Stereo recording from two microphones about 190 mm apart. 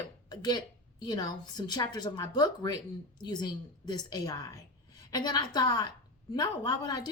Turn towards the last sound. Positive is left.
turn(degrees=20)  # may be behind; listen again after turning